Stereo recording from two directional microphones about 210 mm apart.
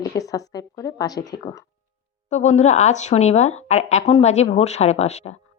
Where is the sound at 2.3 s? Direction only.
35° left (ahead or behind).